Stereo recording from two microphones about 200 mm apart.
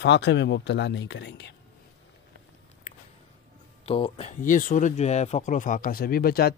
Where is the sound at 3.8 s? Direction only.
30° left (ahead or behind); by 6.5 s 50° left (ahead or behind).